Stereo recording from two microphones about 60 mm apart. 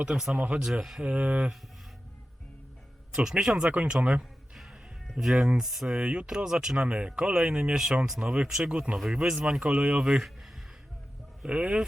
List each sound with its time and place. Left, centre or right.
0.0 s speech: centre
0.3 s speech: right
0.6 s speech: centre
1.0 s speech: right
3.1 s speech: centre
4.2 s music: centre
5.1 s speech: centre
5.9 s speech: centre
11.4 s speech: centre